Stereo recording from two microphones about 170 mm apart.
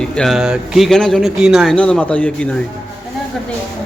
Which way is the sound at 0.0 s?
5° left (ahead or behind).